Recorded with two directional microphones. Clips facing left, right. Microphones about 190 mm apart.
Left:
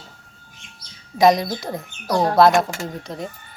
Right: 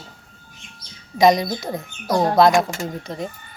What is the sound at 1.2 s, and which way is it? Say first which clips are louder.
Speech: even; centre (ahead or behind).